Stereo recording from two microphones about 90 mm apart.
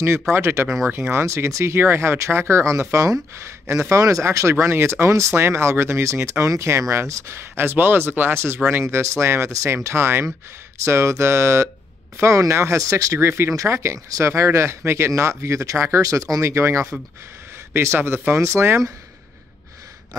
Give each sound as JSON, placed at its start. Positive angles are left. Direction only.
{"t": 0.3, "sound": "speech", "side_deg": -30}